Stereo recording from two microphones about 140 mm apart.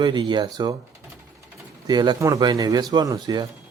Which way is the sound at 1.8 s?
30° right (ahead or behind).